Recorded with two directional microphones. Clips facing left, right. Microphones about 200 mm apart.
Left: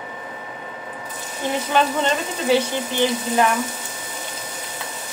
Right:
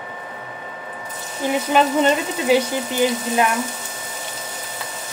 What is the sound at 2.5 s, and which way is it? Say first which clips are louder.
Speech: right 1 dB; 10° right (ahead or behind).